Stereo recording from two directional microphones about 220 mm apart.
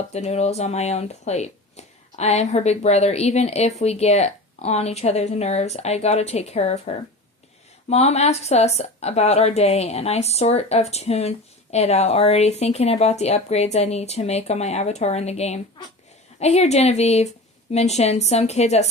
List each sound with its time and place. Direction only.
0.1 s a woman's voice: 30° left (ahead or behind)